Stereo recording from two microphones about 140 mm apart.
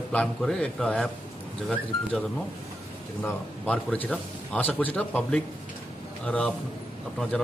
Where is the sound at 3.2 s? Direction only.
10° left (ahead or behind).